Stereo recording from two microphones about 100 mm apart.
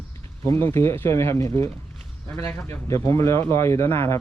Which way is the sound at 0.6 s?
25° left (ahead or behind).